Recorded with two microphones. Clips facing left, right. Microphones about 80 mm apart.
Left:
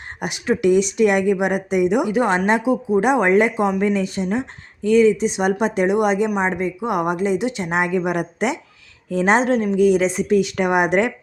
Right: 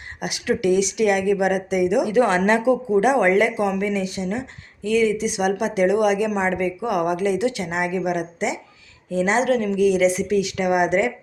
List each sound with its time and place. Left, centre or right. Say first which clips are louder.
0.2 s a woman's voice: left 2 dB; left
7.6 s a woman's voice: left 3 dB; left